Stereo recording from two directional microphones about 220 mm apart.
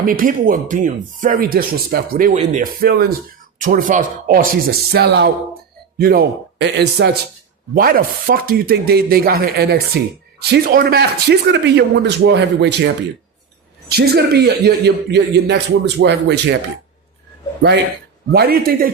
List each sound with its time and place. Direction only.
0.0 s speech: 40° right (ahead or behind)
13.9 s speech: 45° right (ahead or behind)
18.3 s speech: 45° right (ahead or behind)